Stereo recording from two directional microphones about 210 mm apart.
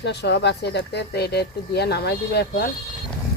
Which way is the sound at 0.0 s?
55° left (ahead or behind).